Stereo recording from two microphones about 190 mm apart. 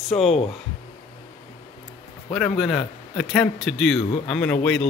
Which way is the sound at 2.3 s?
Centre (ahead or behind).